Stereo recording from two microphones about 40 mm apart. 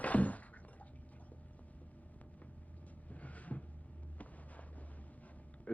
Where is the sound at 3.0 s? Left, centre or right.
Left.